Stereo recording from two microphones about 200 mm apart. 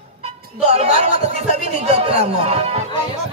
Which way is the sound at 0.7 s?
30° right (ahead or behind).